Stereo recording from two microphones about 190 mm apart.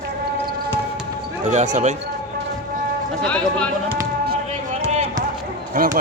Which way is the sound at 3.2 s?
5° left (ahead or behind).